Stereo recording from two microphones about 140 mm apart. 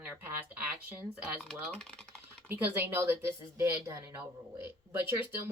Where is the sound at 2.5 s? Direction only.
15° right (ahead or behind).